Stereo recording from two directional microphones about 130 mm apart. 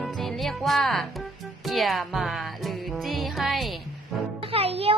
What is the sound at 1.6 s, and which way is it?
Child singing, centre (ahead or behind).